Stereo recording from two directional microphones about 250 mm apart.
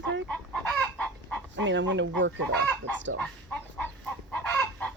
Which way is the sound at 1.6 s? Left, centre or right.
Right.